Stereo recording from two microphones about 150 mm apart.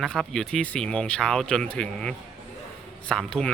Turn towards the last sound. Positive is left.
turn(degrees=5)  # may be behind; listen again after turning